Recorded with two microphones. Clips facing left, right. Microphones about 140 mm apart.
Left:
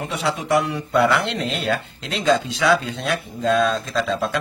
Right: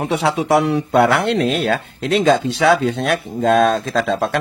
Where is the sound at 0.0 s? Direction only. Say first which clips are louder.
Right 6 dB; 70° right (ahead or behind).